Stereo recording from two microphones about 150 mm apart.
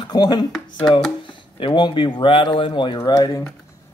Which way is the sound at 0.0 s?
30° left (ahead or behind).